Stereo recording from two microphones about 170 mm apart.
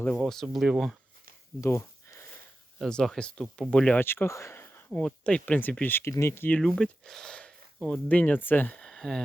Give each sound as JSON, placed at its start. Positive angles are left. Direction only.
{"t": 0.2, "sound": "speech", "side_deg": 0}
{"t": 1.6, "sound": "a sound", "side_deg": 15}
{"t": 2.7, "sound": "speech", "side_deg": 0}